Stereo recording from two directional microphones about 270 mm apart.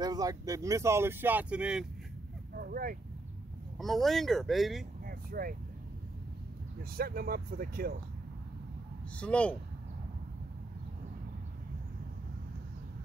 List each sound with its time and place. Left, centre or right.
0.0 s speech: centre
2.5 s speech: right
3.7 s speech: centre
5.0 s vehicle: right
7.0 s speech: right
9.2 s speech: centre